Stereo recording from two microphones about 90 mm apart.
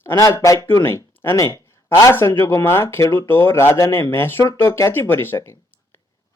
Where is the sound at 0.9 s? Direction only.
25° left (ahead or behind).